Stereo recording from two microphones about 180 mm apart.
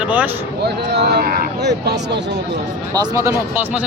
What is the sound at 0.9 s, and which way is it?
Speech, 65° right (ahead or behind).